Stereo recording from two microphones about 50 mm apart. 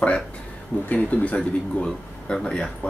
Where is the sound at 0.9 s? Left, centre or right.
Left.